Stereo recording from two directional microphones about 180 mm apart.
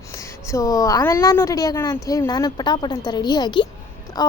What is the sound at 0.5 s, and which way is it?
A woman's voice, 20° left (ahead or behind).